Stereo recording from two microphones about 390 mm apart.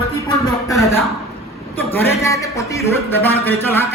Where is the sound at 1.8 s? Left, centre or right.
Centre.